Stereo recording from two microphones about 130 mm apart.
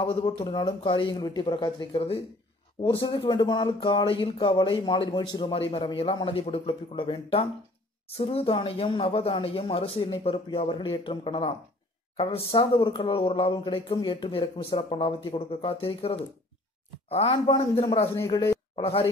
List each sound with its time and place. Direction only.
0.0 s speech: 40° left (ahead or behind)
18.3 s speech: 30° left (ahead or behind)
18.8 s speech: 50° left (ahead or behind)